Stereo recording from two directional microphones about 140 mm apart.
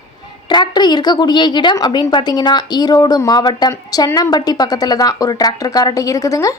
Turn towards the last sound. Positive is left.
turn(degrees=25)  # may be behind; listen again after turning